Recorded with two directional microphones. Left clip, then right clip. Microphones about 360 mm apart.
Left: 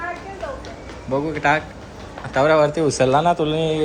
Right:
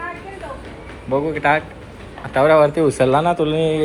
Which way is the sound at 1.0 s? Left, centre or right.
Centre.